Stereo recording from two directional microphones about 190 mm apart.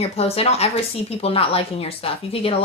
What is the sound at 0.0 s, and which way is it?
Speech, 30° left (ahead or behind).